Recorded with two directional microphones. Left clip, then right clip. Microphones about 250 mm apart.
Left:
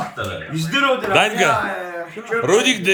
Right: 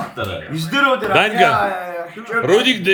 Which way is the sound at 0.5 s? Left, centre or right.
Right.